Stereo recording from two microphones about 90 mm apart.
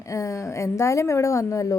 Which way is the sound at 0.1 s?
35° left (ahead or behind).